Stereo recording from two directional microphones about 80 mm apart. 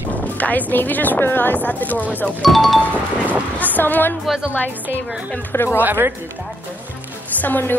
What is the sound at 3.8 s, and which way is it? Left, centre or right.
Speech, left.